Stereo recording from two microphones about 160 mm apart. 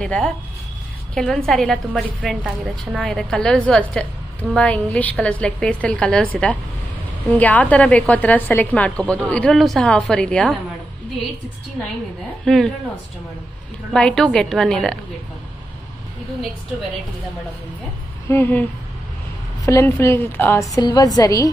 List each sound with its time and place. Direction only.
0.0 s a woman's voice: 5° left (ahead or behind)
7.2 s a woman's voice: 10° left (ahead or behind)
12.4 s a woman's voice: centre (ahead or behind)
13.9 s a woman's voice: 5° left (ahead or behind)
18.3 s a woman's voice: 10° left (ahead or behind)